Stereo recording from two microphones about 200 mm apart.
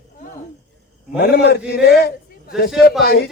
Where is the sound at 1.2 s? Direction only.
55° left (ahead or behind).